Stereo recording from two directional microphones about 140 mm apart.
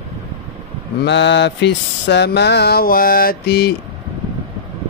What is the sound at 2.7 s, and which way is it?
Speech, 90° left.